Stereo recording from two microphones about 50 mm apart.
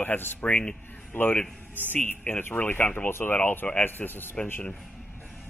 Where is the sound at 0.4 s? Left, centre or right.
Left.